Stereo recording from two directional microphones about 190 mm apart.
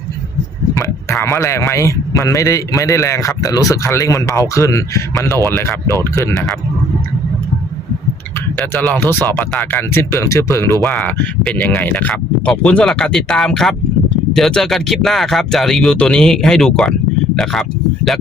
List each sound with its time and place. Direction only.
0.7 s speech: 15° left (ahead or behind)
8.5 s speech: 10° left (ahead or behind)